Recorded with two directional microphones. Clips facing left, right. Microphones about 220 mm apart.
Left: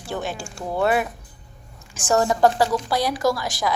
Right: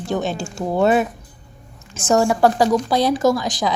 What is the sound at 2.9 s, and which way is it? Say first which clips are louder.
Speech: right 5 dB; 25° right (ahead or behind).